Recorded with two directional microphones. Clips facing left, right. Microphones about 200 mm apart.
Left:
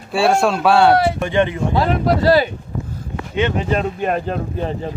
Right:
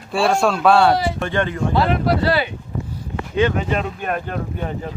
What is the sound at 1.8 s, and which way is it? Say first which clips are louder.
Speech: left 2 dB; 45° left (ahead or behind).